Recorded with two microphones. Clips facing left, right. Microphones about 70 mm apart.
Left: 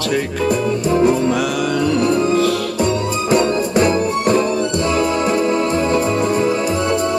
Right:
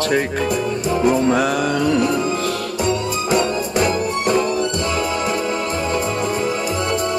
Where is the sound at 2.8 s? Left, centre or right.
Left.